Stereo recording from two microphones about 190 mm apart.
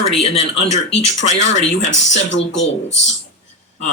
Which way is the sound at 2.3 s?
75° left (ahead or behind).